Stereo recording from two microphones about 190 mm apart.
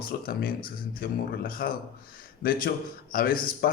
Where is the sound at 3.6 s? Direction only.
55° left (ahead or behind).